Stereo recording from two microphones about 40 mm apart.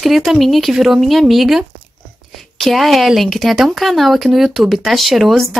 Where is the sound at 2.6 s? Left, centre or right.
Centre.